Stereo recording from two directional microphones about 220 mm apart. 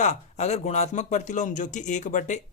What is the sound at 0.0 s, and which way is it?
A man's voice, 30° left (ahead or behind).